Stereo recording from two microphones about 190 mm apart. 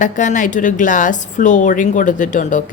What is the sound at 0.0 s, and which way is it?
A woman's voice, 40° left (ahead or behind).